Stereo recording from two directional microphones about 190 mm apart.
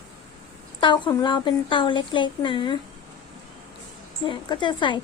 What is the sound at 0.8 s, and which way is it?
A woman's voice, 25° left (ahead or behind).